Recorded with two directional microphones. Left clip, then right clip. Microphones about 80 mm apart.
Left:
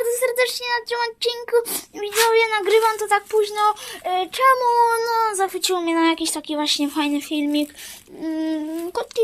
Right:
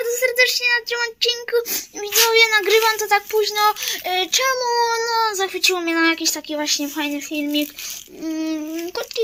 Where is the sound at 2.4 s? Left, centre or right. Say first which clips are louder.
Right 2 dB; centre.